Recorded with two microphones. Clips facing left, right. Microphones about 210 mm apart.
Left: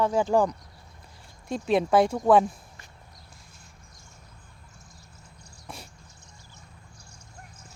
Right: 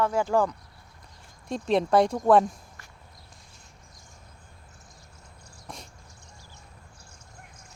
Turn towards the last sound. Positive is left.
turn(degrees=5)  # may be behind; listen again after turning